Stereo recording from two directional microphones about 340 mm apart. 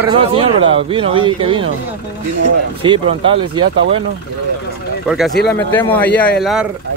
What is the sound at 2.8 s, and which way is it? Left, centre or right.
Speech, centre.